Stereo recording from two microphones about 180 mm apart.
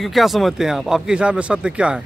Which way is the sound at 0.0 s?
Centre (ahead or behind).